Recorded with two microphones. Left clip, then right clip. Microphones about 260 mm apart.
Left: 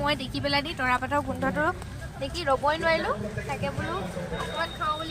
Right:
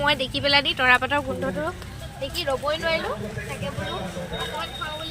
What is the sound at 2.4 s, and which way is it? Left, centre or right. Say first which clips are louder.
Speech: left 1 dB; left.